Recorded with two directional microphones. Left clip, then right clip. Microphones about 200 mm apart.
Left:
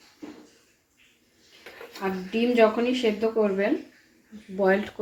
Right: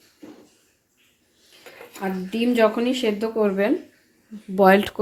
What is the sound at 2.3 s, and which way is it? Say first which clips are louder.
Speech: right 1 dB; 55° right (ahead or behind).